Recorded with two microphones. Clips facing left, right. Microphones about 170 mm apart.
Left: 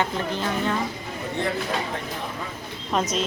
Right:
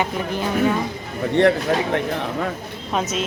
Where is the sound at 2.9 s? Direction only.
5° right (ahead or behind).